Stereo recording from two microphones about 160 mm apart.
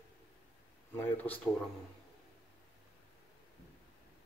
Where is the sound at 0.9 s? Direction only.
10° left (ahead or behind).